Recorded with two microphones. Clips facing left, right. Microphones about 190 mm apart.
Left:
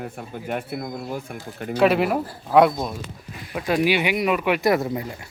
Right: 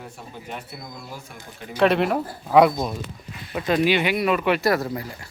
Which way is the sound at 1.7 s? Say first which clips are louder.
Left 1 dB; 5° left (ahead or behind).